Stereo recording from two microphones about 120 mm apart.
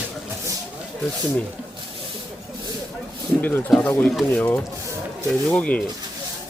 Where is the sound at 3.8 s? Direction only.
15° left (ahead or behind).